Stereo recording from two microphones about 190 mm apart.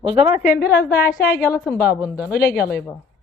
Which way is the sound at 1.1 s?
55° left (ahead or behind).